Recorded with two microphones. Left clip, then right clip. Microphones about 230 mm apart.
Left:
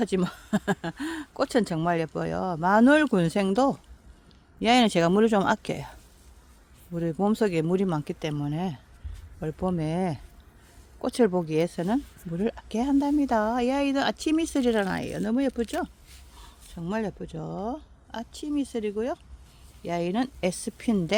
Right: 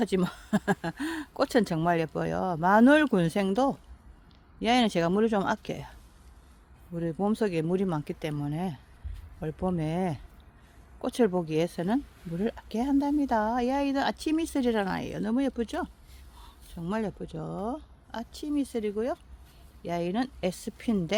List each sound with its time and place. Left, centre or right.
0.0 s speech: centre